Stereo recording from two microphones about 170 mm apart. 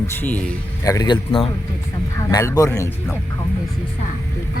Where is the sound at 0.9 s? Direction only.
25° left (ahead or behind).